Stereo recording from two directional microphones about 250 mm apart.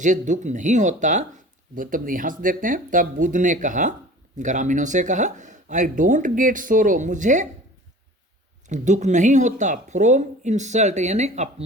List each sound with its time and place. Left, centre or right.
0.0 s speech: right
8.6 s speech: right